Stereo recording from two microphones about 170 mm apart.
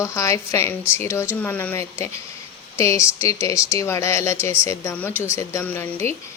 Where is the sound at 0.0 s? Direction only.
15° left (ahead or behind).